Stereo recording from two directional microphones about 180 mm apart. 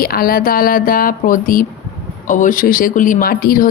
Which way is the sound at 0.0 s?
55° left (ahead or behind).